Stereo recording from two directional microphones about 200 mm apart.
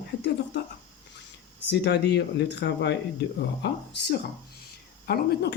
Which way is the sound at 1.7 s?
60° left (ahead or behind).